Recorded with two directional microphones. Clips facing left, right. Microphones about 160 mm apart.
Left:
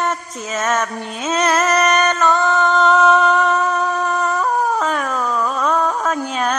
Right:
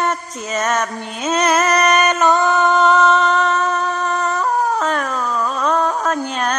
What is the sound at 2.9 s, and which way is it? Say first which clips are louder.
Howl: left 1 dB; 5° left (ahead or behind).